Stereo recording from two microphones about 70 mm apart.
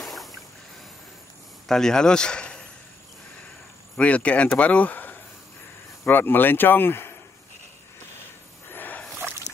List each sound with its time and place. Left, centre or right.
0.0 s boat: centre
1.7 s a man's voice: centre
4.0 s speech: centre
8.6 s a sound: left